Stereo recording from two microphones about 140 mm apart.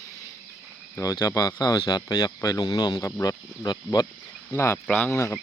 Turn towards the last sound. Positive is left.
turn(degrees=20)  # may be behind; listen again after turning